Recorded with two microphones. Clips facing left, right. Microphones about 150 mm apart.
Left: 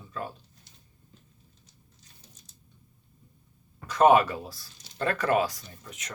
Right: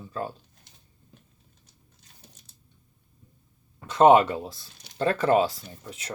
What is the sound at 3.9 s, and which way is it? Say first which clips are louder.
Speech: right 3 dB; 25° right (ahead or behind).